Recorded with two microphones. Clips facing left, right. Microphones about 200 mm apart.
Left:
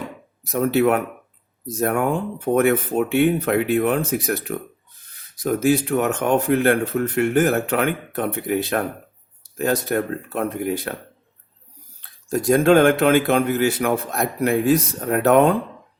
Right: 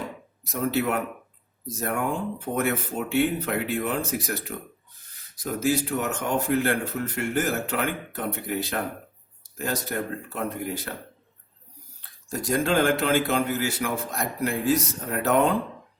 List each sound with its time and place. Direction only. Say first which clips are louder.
0.4 s speech: left 7 dB; 60° left (ahead or behind)
5.5 s speech: left 6 dB; 60° left (ahead or behind)
12.3 s speech: left 9 dB; 60° left (ahead or behind)